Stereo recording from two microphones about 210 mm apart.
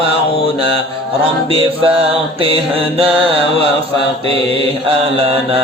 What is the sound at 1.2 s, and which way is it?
Music, 25° right (ahead or behind).